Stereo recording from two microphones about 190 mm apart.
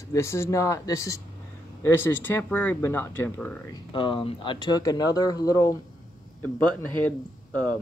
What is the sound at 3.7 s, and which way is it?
Speech, 25° left (ahead or behind).